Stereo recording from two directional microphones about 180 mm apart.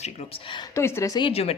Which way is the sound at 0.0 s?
35° left (ahead or behind).